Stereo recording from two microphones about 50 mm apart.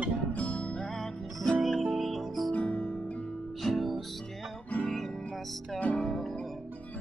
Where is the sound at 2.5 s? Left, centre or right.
Left.